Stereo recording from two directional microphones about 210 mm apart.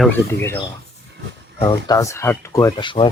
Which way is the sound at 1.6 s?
15° left (ahead or behind).